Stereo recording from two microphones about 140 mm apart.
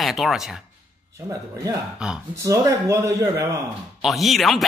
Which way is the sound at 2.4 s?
20° right (ahead or behind).